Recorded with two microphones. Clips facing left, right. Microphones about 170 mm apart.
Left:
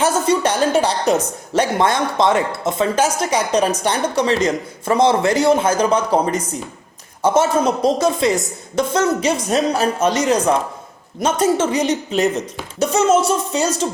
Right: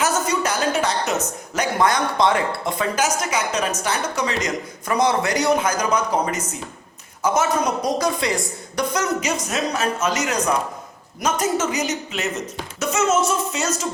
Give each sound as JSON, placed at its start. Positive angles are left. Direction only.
{"t": 0.0, "sound": "speech", "side_deg": 30}